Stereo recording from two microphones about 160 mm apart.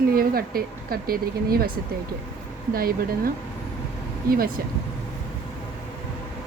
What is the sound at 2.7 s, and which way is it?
A woman's voice, 65° right (ahead or behind).